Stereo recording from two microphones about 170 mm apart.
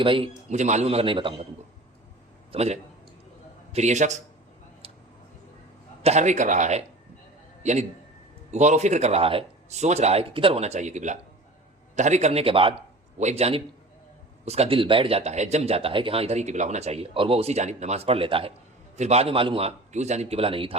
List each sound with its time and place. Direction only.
0.0 s speech: 30° right (ahead or behind)
0.5 s speech: 45° right (ahead or behind)
2.5 s a man's voice: 40° right (ahead or behind)
6.0 s a man's voice: 40° right (ahead or behind)